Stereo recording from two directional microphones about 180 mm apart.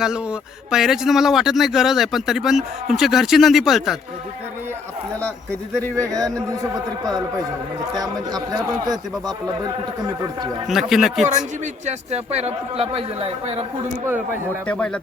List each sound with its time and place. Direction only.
0.0 s speech: 5° right (ahead or behind)
6.0 s speech: 20° right (ahead or behind)
7.9 s speech: 20° right (ahead or behind)
10.7 s speech: centre (ahead or behind)
11.6 s a man's voice: 35° right (ahead or behind)
14.7 s speech: 5° left (ahead or behind)